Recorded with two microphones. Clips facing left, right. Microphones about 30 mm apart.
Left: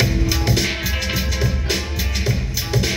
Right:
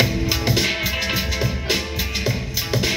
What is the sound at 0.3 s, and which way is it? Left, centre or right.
Music, centre.